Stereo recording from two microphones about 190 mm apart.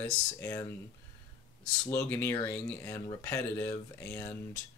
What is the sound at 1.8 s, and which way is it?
Speech, 15° left (ahead or behind).